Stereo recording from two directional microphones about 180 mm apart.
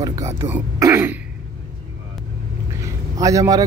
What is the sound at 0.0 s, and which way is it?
Speech, 20° right (ahead or behind).